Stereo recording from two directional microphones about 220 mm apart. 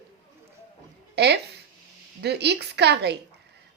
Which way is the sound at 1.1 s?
50° right (ahead or behind).